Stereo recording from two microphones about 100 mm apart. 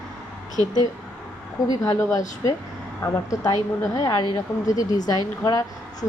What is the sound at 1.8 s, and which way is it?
A woman's voice, 30° left (ahead or behind).